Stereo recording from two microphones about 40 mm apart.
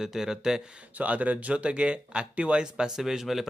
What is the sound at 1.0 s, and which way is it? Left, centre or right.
Speech, right.